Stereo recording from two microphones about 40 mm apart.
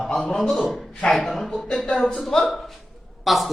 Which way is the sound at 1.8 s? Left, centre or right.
Left.